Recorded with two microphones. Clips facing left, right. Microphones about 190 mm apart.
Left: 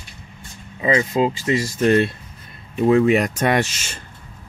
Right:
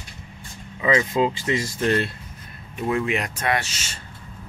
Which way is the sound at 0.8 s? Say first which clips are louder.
Left 2 dB; 40° left (ahead or behind).